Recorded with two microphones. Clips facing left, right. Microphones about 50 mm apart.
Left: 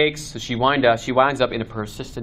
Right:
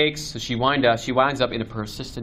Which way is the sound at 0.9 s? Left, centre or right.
Left.